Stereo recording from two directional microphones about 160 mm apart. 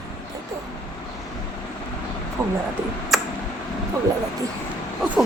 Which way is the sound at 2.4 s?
20° right (ahead or behind).